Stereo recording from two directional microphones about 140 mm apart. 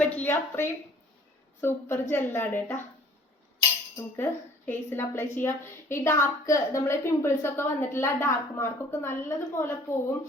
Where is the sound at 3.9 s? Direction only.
15° left (ahead or behind).